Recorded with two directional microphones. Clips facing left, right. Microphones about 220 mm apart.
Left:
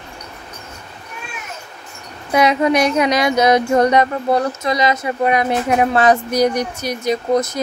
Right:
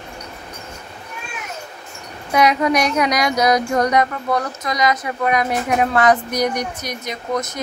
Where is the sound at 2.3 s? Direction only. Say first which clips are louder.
Left 2 dB; 25° left (ahead or behind).